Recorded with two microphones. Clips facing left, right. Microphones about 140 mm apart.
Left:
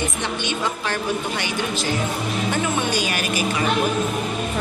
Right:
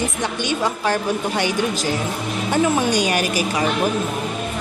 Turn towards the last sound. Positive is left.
turn(degrees=-40)  # may be behind; listen again after turning